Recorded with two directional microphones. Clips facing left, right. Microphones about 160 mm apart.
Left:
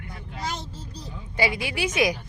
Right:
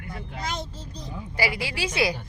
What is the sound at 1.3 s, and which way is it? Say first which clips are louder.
Speech: left 2 dB; 20° left (ahead or behind).